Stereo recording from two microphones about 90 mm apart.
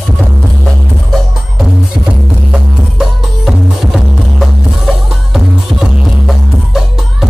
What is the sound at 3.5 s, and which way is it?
Music, centre (ahead or behind).